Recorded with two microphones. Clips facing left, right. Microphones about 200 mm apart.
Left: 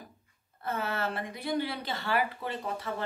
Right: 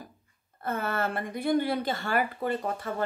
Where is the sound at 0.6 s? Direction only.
50° right (ahead or behind).